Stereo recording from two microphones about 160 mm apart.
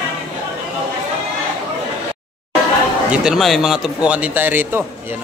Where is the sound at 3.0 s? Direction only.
5° right (ahead or behind).